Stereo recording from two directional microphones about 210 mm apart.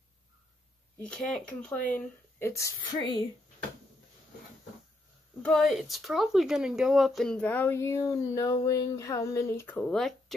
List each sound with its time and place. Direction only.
1.0 s speech: centre (ahead or behind); by 3.3 s 20° left (ahead or behind)
5.4 s speech: centre (ahead or behind)